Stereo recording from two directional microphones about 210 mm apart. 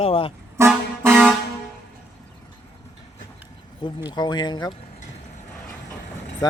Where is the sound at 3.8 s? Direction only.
25° left (ahead or behind).